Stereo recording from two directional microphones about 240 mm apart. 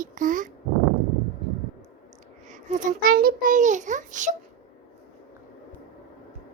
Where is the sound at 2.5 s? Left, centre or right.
Right.